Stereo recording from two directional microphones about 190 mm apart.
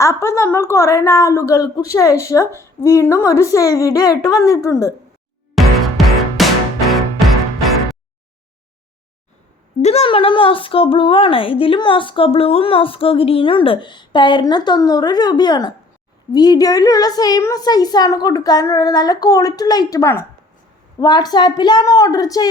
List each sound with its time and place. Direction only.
0.0 s a woman's voice: 15° left (ahead or behind)
5.5 s music: centre (ahead or behind)
9.8 s speech: 30° left (ahead or behind)